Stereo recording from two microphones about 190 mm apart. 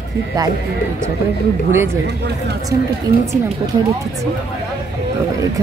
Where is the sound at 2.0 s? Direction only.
60° right (ahead or behind).